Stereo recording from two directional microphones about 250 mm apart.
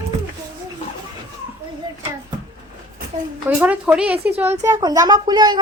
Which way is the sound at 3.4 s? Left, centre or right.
Centre.